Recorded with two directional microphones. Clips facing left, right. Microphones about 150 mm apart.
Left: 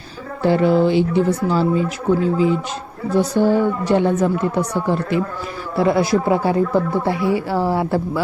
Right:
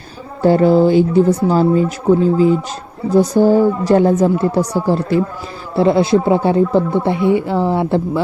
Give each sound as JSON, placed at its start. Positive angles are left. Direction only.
{"t": 0.4, "sound": "speech", "side_deg": -40}